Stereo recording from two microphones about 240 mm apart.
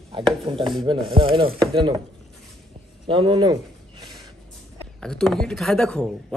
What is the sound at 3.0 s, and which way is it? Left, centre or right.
Speech, right.